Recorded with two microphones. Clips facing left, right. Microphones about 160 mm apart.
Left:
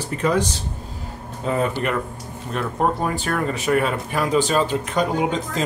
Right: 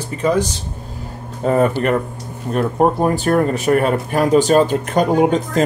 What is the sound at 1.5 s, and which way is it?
Speech, 45° right (ahead or behind).